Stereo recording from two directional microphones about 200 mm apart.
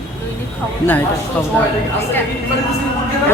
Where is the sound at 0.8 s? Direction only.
15° left (ahead or behind).